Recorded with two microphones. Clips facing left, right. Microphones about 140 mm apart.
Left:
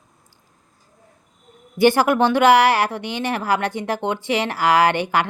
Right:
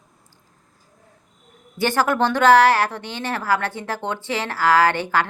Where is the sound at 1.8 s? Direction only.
15° left (ahead or behind).